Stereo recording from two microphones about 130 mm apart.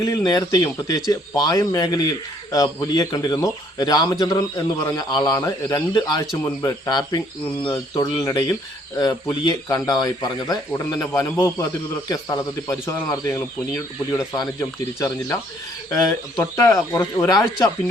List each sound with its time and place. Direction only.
0.0 s a man's voice: 30° left (ahead or behind)